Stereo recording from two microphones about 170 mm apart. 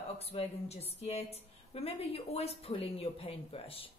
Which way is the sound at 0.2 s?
35° left (ahead or behind).